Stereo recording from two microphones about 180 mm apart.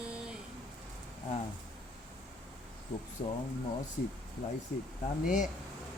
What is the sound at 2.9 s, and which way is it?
Speech, 35° left (ahead or behind).